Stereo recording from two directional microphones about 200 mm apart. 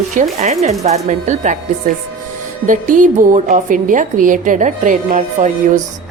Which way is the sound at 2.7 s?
40° right (ahead or behind).